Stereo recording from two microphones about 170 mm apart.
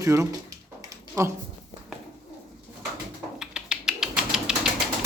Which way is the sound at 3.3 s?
5° right (ahead or behind).